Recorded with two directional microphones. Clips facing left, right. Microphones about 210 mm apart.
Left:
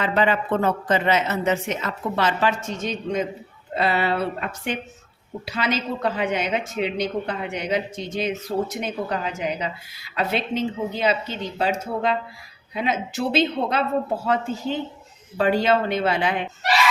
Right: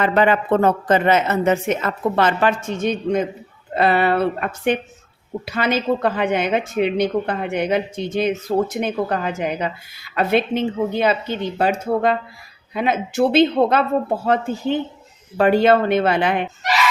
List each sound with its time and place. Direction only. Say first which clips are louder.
0.0 s a woman's voice: right 4 dB; 55° right (ahead or behind)
15.4 s a woman's voice: right 5 dB; 60° right (ahead or behind)